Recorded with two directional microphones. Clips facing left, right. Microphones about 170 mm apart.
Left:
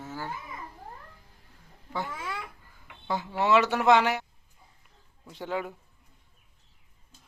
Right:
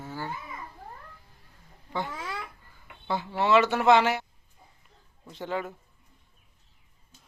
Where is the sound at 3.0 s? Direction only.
10° left (ahead or behind).